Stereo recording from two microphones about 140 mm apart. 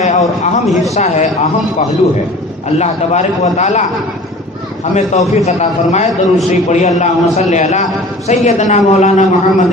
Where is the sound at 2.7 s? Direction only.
55° left (ahead or behind).